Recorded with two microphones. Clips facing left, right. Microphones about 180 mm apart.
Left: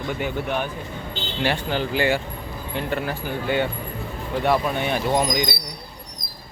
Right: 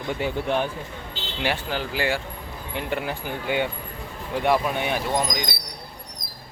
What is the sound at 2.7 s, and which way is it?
Speech, 15° right (ahead or behind).